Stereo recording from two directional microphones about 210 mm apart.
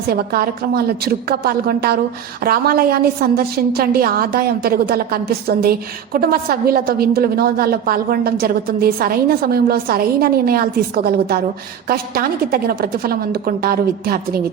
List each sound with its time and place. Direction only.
0.1 s a woman's voice: 50° right (ahead or behind)